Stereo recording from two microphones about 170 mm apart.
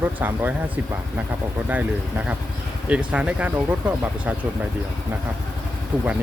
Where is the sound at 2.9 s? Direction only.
5° right (ahead or behind).